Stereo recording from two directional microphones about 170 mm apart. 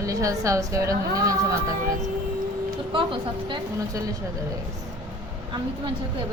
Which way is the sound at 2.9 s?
30° right (ahead or behind).